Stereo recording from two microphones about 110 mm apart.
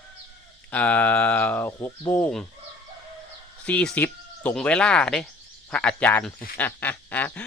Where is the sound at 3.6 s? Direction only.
10° left (ahead or behind).